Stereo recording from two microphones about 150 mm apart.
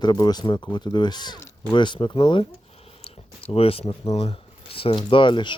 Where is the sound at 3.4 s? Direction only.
40° left (ahead or behind).